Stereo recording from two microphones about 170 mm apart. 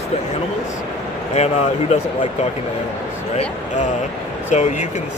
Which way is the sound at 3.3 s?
40° left (ahead or behind).